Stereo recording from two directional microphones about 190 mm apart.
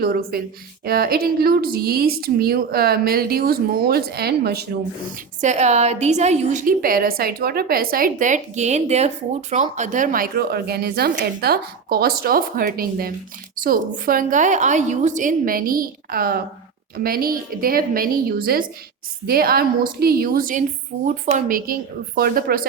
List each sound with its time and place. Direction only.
0.0 s a woman's voice: 55° right (ahead or behind)
5.4 s a woman's voice: 40° right (ahead or behind)